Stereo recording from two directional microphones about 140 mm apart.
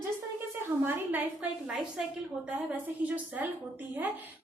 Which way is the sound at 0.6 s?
15° right (ahead or behind).